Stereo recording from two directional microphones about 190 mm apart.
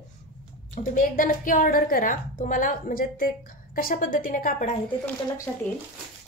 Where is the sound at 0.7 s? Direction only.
45° left (ahead or behind).